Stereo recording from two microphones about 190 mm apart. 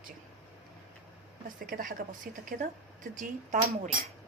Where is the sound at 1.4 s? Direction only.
45° right (ahead or behind).